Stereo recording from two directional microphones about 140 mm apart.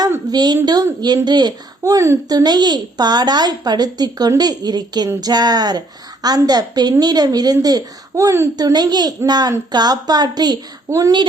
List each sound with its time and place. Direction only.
0.0 s a woman's voice: 25° right (ahead or behind)